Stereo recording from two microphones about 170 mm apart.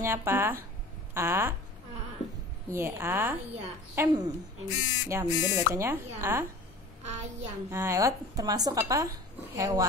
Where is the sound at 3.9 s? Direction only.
25° right (ahead or behind).